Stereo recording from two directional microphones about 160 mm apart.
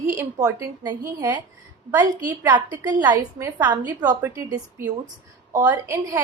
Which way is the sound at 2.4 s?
25° right (ahead or behind).